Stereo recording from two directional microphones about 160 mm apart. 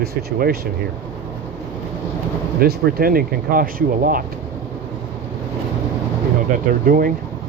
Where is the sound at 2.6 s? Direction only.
65° right (ahead or behind).